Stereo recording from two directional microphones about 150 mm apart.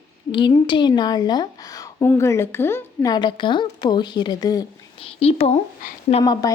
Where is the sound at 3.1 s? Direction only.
30° left (ahead or behind).